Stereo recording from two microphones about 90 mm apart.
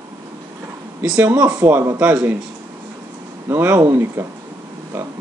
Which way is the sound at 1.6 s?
25° right (ahead or behind).